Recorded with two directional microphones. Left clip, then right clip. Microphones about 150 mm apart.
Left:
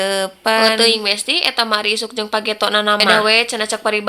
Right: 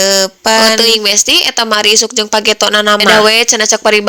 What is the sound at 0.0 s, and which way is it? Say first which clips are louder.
A woman's voice: right 7 dB; 35° right (ahead or behind).